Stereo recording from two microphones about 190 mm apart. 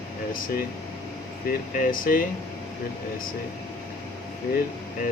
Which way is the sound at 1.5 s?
45° left (ahead or behind).